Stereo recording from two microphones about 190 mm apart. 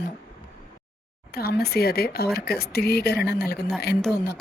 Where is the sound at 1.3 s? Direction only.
55° left (ahead or behind).